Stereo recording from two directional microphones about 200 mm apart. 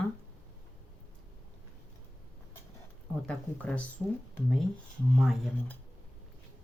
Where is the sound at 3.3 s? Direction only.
5° left (ahead or behind).